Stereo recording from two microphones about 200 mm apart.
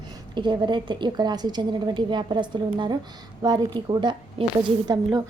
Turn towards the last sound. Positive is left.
turn(degrees=-20)  # may be behind; listen again after turning